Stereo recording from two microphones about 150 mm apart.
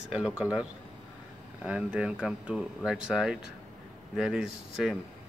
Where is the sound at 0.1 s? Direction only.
5° right (ahead or behind).